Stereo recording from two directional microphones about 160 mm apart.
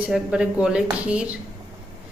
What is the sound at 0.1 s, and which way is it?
A woman's voice, 5° right (ahead or behind).